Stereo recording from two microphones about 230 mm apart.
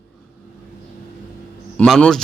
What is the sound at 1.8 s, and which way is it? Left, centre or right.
Speech, centre.